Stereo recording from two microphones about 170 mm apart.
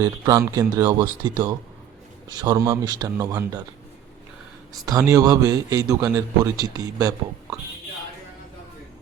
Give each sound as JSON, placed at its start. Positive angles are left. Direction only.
{"t": 0.0, "sound": "a man's voice", "side_deg": -20}
{"t": 2.3, "sound": "a man's voice", "side_deg": -20}
{"t": 4.9, "sound": "a man's voice", "side_deg": -20}